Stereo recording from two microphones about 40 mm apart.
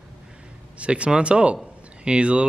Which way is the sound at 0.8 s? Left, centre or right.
Right.